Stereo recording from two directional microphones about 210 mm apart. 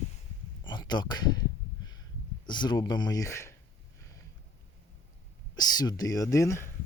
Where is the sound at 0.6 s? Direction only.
20° left (ahead or behind).